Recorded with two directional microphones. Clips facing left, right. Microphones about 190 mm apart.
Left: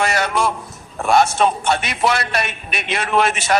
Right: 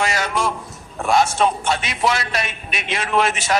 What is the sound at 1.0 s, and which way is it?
A man's voice, 60° left (ahead or behind).